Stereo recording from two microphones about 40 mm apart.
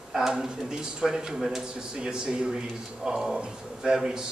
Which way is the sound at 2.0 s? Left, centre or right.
Right.